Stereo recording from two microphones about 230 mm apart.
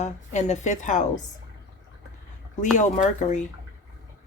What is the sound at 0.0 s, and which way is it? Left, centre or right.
A woman's voice, left.